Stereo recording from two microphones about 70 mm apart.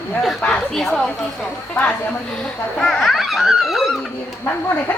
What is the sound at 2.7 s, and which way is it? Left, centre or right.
Speech, centre.